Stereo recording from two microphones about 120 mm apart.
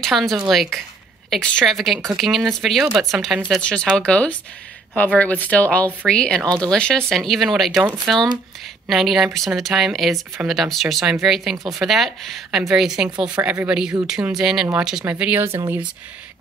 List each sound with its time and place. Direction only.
0.0 s speech: centre (ahead or behind)
7.8 s speech: 15° right (ahead or behind)
8.8 s speech: centre (ahead or behind)